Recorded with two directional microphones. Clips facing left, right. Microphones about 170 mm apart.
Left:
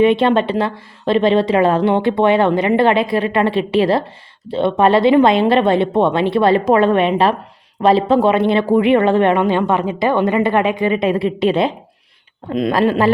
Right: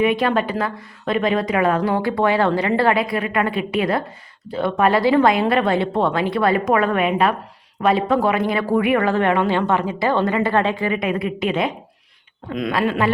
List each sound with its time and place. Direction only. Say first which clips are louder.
0.0 s speech: left 5 dB; 25° left (ahead or behind)